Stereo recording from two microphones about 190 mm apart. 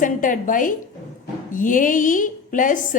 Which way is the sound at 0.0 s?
45° left (ahead or behind).